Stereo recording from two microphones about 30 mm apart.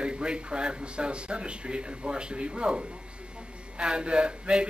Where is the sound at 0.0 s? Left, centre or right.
Right.